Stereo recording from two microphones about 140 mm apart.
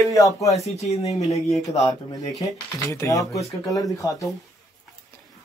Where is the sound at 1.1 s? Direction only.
50° left (ahead or behind).